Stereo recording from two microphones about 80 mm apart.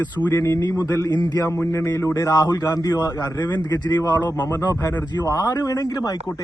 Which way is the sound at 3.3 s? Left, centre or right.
Left.